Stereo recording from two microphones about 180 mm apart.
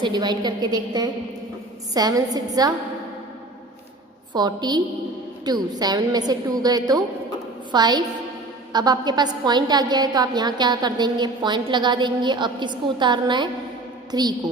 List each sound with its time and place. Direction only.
0.0 s a woman's voice: 25° right (ahead or behind)
4.4 s a woman's voice: 25° right (ahead or behind)